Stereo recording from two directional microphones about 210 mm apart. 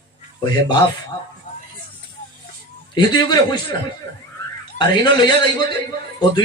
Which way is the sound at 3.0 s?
20° left (ahead or behind).